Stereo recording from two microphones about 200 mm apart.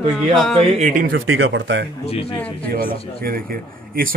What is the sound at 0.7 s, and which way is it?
Speech, 40° right (ahead or behind).